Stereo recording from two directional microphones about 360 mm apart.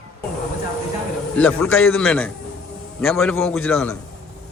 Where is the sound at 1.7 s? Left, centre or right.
Left.